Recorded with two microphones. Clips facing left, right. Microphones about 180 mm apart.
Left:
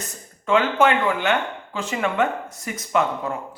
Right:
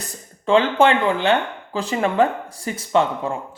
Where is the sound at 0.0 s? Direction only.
30° right (ahead or behind).